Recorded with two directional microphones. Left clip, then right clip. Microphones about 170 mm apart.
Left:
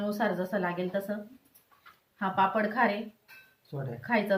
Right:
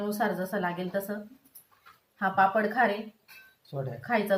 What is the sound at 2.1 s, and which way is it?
Speech, centre (ahead or behind).